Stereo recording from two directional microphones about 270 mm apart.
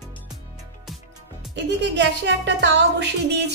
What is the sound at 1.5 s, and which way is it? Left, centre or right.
Speech, right.